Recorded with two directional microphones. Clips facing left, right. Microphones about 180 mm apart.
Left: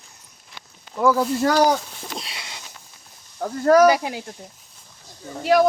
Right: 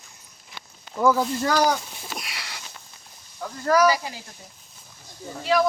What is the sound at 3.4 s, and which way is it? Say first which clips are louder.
Speech: left 6 dB; 45° left (ahead or behind).